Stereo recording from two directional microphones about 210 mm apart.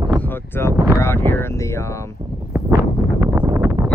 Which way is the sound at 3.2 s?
15° right (ahead or behind).